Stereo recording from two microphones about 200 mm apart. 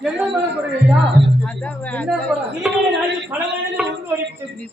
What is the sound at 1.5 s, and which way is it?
Speech, 5° left (ahead or behind).